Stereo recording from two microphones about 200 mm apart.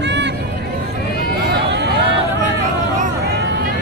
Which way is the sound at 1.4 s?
60° right (ahead or behind).